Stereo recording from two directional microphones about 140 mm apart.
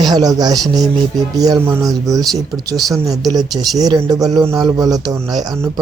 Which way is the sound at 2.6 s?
25° right (ahead or behind).